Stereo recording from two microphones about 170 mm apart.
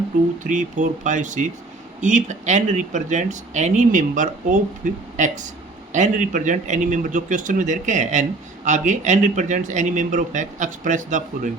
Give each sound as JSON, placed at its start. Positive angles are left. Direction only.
{"t": 0.4, "sound": "speech", "side_deg": -50}